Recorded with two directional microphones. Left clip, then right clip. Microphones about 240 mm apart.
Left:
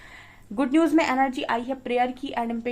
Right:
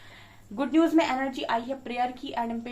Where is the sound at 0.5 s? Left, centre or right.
Left.